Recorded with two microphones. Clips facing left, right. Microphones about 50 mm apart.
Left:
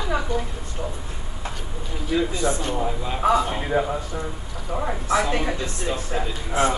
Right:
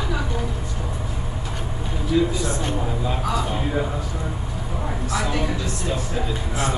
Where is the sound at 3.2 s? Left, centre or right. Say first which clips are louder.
Left 4 dB; left.